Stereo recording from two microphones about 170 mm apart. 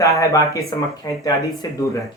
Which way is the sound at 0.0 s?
20° left (ahead or behind).